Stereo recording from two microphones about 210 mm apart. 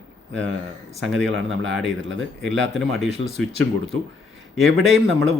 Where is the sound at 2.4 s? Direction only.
Centre (ahead or behind).